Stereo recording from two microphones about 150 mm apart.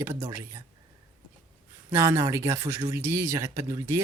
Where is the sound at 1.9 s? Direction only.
20° right (ahead or behind).